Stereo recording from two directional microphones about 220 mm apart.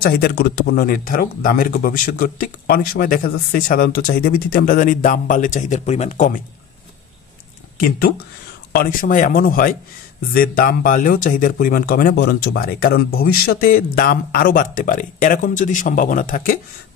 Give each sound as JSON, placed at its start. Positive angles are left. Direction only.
{"t": 0.0, "sound": "speech", "side_deg": 45}
{"t": 8.7, "sound": "speech", "side_deg": 40}